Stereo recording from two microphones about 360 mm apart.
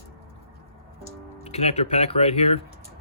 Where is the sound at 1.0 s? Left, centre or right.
Centre.